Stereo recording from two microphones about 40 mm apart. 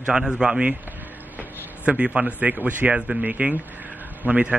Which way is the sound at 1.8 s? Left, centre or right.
Right.